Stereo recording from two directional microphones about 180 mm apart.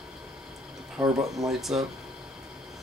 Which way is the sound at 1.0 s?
20° right (ahead or behind).